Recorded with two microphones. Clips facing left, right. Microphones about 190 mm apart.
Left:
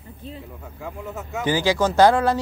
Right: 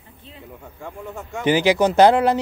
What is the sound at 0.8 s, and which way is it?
Speech, 5° left (ahead or behind).